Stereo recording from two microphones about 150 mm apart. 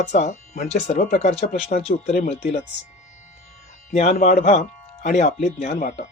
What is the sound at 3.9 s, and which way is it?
Speech, 50° left (ahead or behind).